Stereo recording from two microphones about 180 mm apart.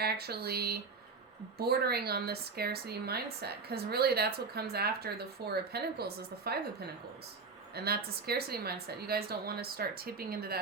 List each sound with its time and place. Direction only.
0.0 s a woman's voice: 60° right (ahead or behind)